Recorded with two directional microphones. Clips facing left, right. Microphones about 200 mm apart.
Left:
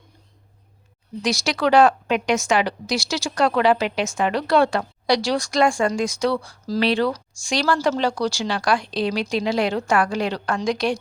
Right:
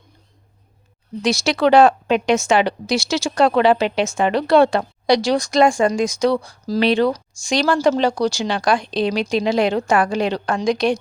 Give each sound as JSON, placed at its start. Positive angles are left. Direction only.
{"t": 1.2, "sound": "speech", "side_deg": -25}